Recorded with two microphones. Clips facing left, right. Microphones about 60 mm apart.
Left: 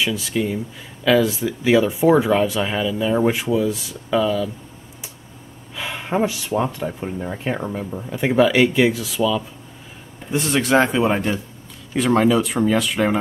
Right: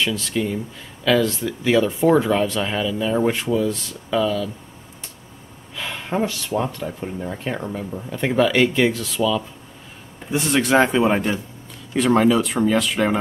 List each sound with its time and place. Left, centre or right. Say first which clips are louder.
0.0 s speech: left 1 dB; centre
5.8 s speech: left 2 dB; centre